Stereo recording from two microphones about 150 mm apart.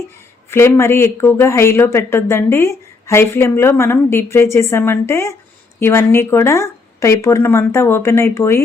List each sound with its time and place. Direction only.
0.5 s speech: 15° left (ahead or behind)